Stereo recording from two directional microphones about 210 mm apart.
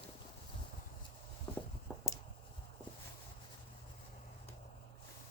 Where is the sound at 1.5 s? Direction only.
10° left (ahead or behind).